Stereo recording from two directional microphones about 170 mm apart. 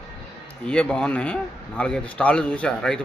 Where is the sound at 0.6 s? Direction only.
5° left (ahead or behind).